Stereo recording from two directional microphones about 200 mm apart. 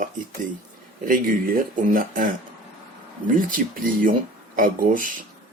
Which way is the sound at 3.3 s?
45° right (ahead or behind).